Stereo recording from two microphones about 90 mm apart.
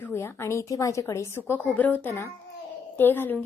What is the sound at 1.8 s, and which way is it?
A child's voice, 20° left (ahead or behind).